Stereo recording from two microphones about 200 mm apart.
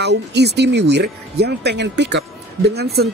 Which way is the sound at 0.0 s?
55° right (ahead or behind).